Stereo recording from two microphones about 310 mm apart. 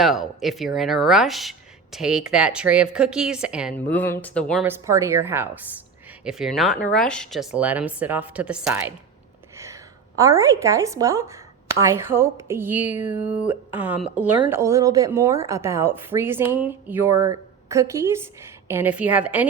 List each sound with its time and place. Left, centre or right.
0.0 s a woman's voice: centre
13.0 s speech: left
13.2 s speech: centre